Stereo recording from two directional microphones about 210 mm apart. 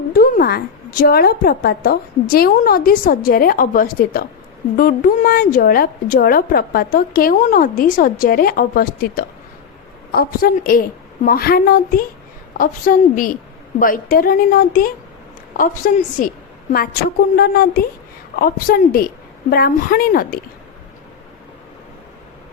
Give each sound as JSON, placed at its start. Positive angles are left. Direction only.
{"t": 0.1, "sound": "a woman's voice", "side_deg": 45}